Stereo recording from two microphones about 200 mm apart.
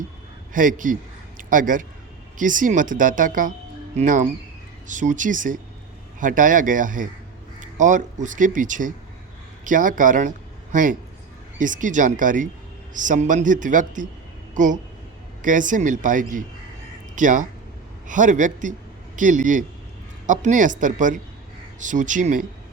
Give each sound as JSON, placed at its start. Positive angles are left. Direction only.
{"t": 0.5, "sound": "a man's voice", "side_deg": -40}